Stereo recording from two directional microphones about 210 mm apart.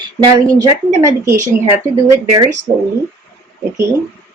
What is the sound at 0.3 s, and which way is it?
Speech, 15° right (ahead or behind).